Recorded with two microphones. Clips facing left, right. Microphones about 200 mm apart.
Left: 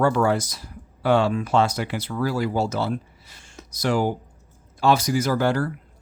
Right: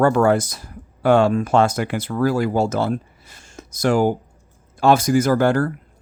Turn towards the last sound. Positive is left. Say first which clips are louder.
# right 5 dB
turn(degrees=-50)  # may be behind; listen again after turning